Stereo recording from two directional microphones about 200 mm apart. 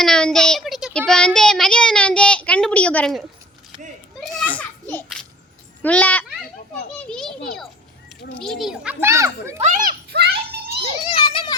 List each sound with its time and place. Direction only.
0.0 s speech: 5° left (ahead or behind)
4.2 s children playing: 5° left (ahead or behind)
5.8 s a child's voice: 10° left (ahead or behind); by 9.6 s 15° right (ahead or behind)
9.6 s a child's voice: 35° right (ahead or behind)
10.1 s a sound: 50° right (ahead or behind)
11.0 s children playing: 25° left (ahead or behind)